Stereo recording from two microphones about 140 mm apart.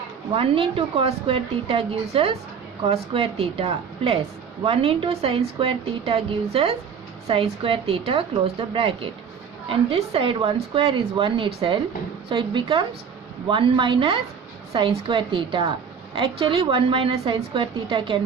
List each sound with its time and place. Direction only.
0.3 s a woman's voice: 40° right (ahead or behind)